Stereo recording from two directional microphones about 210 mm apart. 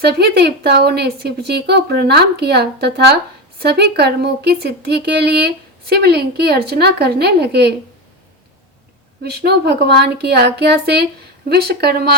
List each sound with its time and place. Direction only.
0.0 s speech: 50° right (ahead or behind)
9.2 s speech: 50° right (ahead or behind)